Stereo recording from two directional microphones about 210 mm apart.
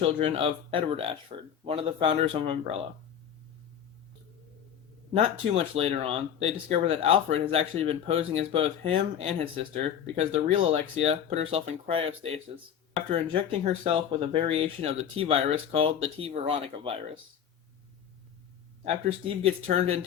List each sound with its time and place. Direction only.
0.0 s speech: 25° right (ahead or behind)
5.1 s speech: 25° right (ahead or behind)
13.8 s speech: 25° right (ahead or behind)
18.9 s speech: 25° right (ahead or behind)